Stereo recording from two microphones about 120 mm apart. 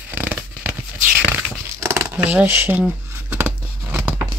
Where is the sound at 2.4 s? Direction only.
20° right (ahead or behind).